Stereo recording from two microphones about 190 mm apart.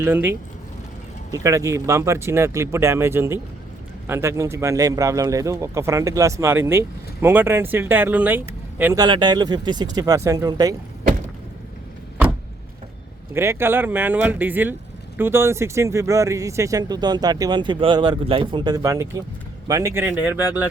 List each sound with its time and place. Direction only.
0.0 s speech: 10° right (ahead or behind)
1.5 s speech: 15° right (ahead or behind)
13.3 s speech: 15° right (ahead or behind)